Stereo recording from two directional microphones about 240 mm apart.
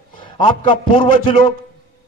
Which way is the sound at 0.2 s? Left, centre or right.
Centre.